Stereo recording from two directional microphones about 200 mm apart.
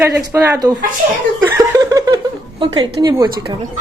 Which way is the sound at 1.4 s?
15° right (ahead or behind).